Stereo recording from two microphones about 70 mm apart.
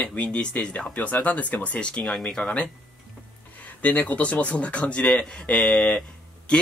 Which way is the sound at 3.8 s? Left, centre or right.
Left.